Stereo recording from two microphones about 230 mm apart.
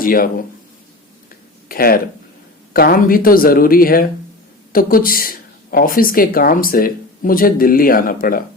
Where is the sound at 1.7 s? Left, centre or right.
Left.